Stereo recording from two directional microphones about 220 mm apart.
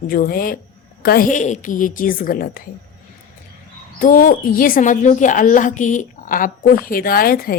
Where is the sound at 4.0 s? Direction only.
40° left (ahead or behind).